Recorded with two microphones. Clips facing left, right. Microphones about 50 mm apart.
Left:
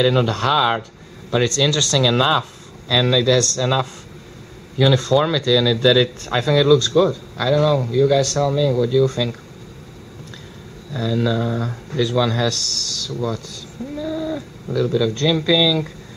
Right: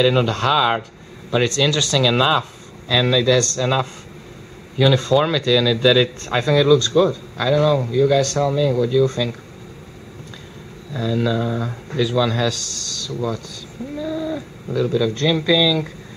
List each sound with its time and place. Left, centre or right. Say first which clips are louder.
0.0 s speech: even; centre
10.9 s speech: even; centre